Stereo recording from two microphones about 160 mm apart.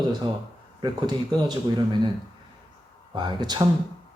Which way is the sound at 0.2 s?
30° right (ahead or behind).